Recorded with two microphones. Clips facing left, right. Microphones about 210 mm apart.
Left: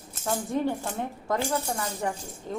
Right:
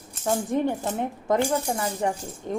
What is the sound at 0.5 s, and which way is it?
Mantra, 20° right (ahead or behind).